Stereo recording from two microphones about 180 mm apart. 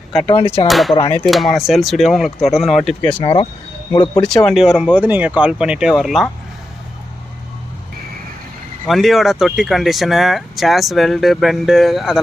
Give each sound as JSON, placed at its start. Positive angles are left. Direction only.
{"t": 0.3, "sound": "speech", "side_deg": 30}
{"t": 0.7, "sound": "speech", "side_deg": 0}
{"t": 3.9, "sound": "speech", "side_deg": 25}
{"t": 4.4, "sound": "speech", "side_deg": 0}
{"t": 8.9, "sound": "speech", "side_deg": 0}